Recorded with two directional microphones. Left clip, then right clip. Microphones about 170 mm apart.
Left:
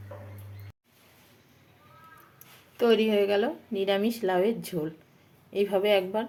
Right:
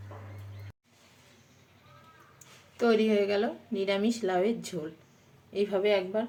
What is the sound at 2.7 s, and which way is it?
A woman's voice, 25° left (ahead or behind).